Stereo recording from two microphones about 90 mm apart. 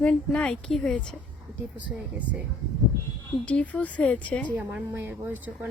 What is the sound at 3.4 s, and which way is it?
A woman's voice, 15° left (ahead or behind).